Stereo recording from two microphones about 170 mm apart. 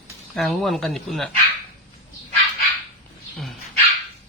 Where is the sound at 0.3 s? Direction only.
Centre (ahead or behind).